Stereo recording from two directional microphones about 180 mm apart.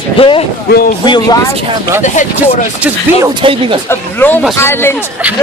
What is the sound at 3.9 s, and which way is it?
Speech, 10° left (ahead or behind).